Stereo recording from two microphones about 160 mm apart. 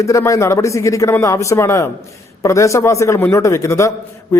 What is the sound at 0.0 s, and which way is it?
A man's voice, 20° left (ahead or behind).